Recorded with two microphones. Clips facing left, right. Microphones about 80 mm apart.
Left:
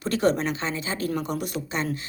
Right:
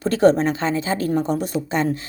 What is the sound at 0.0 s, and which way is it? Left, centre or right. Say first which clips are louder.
Speech: right 7 dB; right.